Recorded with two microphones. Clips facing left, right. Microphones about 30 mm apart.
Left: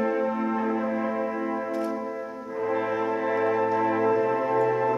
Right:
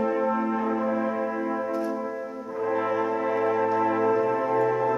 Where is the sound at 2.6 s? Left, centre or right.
Centre.